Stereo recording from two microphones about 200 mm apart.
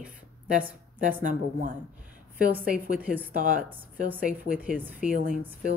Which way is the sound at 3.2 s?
45° right (ahead or behind).